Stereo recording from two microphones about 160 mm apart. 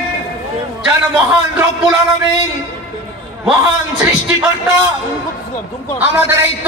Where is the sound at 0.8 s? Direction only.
5° right (ahead or behind).